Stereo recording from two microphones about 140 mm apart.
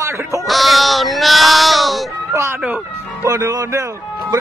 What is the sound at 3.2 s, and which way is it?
Speech, 25° right (ahead or behind).